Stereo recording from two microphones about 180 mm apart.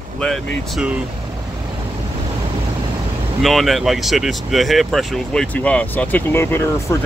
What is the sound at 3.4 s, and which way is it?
Speech, centre (ahead or behind).